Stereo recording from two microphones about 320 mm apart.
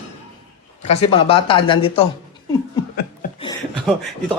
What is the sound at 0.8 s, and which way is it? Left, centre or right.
Speech, centre.